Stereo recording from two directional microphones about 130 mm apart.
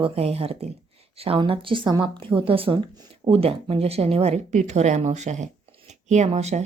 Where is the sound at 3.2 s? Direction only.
50° right (ahead or behind).